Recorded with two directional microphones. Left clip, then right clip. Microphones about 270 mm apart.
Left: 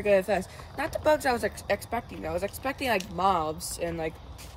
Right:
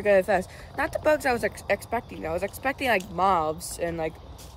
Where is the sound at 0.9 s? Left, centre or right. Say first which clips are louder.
Right 1 dB; centre.